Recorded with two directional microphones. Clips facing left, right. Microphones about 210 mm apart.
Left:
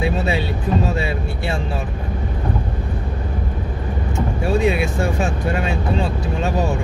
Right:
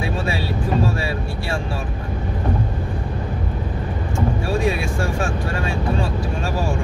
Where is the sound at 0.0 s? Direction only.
20° left (ahead or behind).